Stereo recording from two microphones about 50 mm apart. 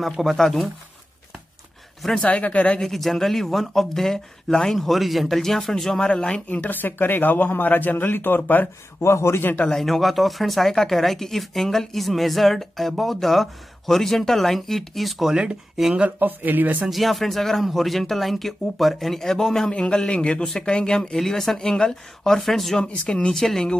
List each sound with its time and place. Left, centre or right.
0.2 s speech: centre
2.1 s a man's voice: left
2.8 s speech: centre
4.7 s speech: centre
6.0 s a man's voice: centre
6.5 s speech: left
9.0 s a man's voice: left
9.7 s speech: centre
16.2 s speech: right
16.9 s a man's voice: centre
22.8 s speech: centre